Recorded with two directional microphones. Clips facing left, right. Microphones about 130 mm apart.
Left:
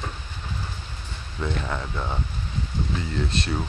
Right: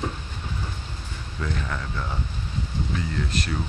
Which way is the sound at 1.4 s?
25° left (ahead or behind).